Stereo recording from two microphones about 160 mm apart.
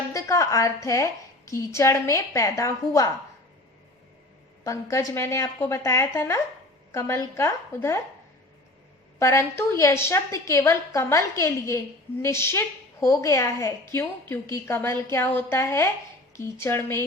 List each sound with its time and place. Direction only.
0.1 s a woman's voice: 20° left (ahead or behind)
4.6 s a woman's voice: 20° left (ahead or behind)
9.1 s a woman's voice: 20° left (ahead or behind)